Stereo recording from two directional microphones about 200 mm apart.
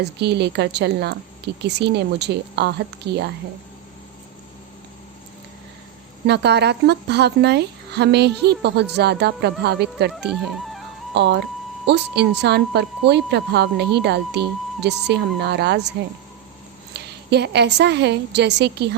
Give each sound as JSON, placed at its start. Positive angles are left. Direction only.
{"t": 0.0, "sound": "speech", "side_deg": -55}
{"t": 6.2, "sound": "speech", "side_deg": -55}
{"t": 16.9, "sound": "a woman's voice", "side_deg": -55}